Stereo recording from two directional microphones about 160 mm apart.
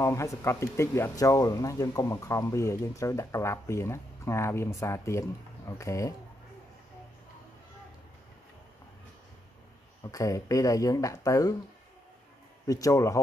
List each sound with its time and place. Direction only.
0.0 s speech: 20° left (ahead or behind)
10.0 s speech: 20° left (ahead or behind)
12.6 s speech: 20° left (ahead or behind)